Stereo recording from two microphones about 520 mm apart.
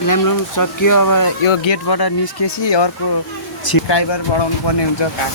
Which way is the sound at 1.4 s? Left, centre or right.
Left.